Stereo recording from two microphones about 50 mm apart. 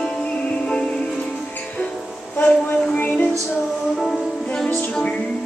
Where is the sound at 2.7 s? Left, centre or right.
Left.